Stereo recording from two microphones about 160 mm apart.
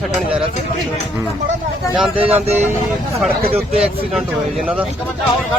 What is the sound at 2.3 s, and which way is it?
Speech, 10° right (ahead or behind).